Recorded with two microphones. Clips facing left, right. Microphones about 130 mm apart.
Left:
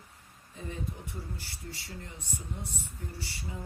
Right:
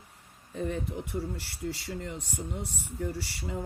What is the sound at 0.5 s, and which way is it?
Speech, 65° right (ahead or behind).